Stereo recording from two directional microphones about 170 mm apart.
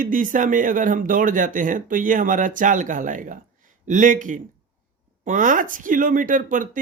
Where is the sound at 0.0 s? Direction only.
50° right (ahead or behind).